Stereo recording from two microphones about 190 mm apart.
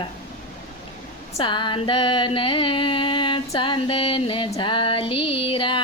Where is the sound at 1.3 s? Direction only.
25° left (ahead or behind).